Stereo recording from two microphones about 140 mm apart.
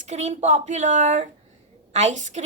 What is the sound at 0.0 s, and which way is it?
A woman's voice, 55° right (ahead or behind).